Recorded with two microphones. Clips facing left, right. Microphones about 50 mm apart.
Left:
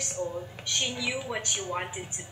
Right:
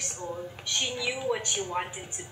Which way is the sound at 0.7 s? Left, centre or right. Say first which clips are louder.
Even; centre.